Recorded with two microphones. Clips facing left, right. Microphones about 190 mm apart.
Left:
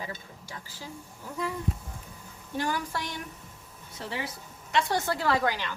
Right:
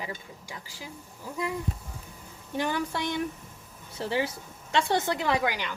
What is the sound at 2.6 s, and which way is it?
A woman's voice, 20° right (ahead or behind).